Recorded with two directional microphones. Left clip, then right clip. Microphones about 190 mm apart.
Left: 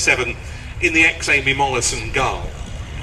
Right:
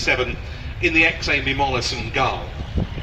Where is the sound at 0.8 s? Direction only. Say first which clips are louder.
Left 2 dB; 55° right (ahead or behind).